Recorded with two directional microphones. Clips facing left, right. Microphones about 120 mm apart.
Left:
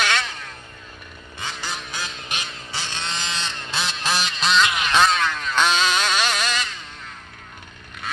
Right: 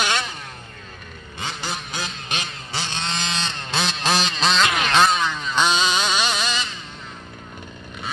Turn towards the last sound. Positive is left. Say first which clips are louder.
# even
turn(degrees=0)  # may be behind; listen again after turning